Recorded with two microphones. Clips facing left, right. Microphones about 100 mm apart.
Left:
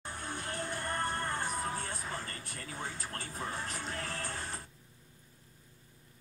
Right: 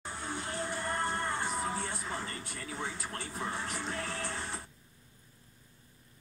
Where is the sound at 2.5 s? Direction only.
15° right (ahead or behind).